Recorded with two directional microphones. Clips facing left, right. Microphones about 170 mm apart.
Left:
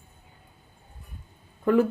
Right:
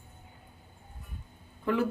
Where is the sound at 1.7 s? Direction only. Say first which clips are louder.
Left 8 dB; 45° left (ahead or behind).